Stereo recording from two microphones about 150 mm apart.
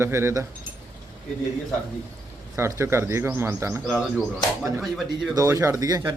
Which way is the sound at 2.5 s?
20° right (ahead or behind).